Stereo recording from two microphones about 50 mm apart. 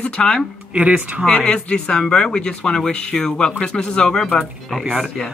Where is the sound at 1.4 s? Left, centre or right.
Centre.